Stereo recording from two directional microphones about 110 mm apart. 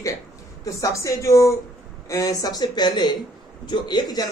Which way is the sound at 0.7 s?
30° left (ahead or behind).